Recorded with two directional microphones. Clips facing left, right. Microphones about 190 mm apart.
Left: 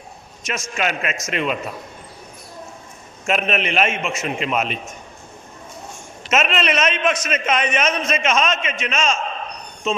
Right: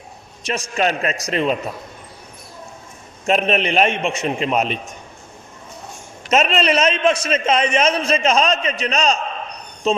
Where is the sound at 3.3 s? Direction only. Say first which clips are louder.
Right 3 dB; 35° right (ahead or behind).